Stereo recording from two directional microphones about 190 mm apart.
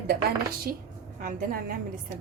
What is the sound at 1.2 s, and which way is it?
Speech, 50° right (ahead or behind).